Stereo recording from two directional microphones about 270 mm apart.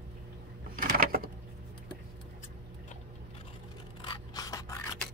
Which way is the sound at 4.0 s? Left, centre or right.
Centre.